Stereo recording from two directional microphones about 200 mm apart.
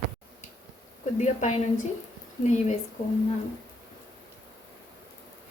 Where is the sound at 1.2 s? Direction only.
35° left (ahead or behind).